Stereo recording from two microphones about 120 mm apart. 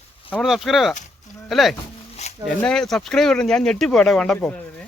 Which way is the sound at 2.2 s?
65° left (ahead or behind).